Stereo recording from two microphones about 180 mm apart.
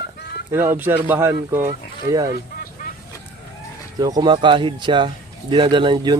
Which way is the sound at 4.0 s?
20° right (ahead or behind).